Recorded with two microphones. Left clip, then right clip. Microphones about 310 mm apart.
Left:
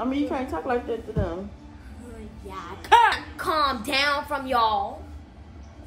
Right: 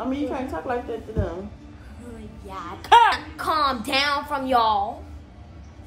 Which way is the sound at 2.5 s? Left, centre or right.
Centre.